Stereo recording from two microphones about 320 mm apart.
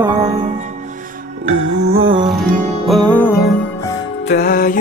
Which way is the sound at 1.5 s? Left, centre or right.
Right.